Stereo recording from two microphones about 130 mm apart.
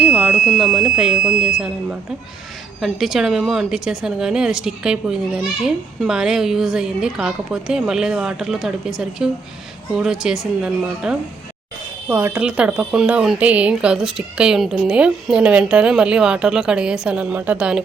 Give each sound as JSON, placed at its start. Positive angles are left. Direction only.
{"t": 0.0, "sound": "a woman's voice", "side_deg": -10}
{"t": 12.0, "sound": "speech", "side_deg": -15}